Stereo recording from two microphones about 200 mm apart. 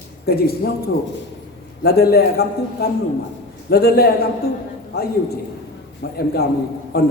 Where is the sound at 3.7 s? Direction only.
50° left (ahead or behind).